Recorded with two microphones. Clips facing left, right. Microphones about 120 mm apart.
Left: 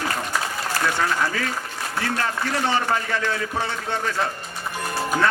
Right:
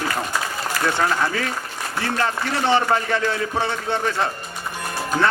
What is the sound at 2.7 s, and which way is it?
Speech, 30° right (ahead or behind).